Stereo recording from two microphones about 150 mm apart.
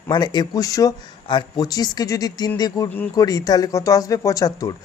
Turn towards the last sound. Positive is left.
turn(degrees=25)  # may be behind; listen again after turning